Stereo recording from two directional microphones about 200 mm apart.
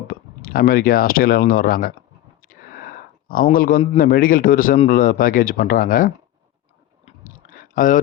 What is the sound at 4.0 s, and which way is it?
A man's voice, 45° left (ahead or behind).